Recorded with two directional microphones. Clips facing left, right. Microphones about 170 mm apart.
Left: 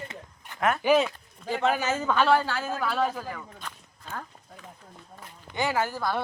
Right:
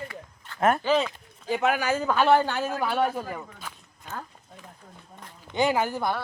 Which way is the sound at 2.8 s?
Centre (ahead or behind).